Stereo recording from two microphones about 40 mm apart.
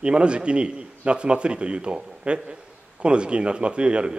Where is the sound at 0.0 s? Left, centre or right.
Right.